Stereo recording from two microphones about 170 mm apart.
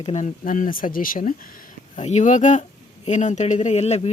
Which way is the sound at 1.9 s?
45° left (ahead or behind).